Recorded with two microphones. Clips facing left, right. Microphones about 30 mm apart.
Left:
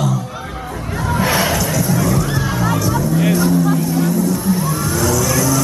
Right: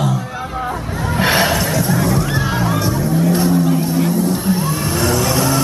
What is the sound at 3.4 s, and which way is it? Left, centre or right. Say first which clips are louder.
Vehicle: even; right.